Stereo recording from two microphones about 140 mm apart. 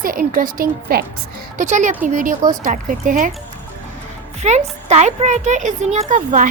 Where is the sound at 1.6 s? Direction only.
60° right (ahead or behind).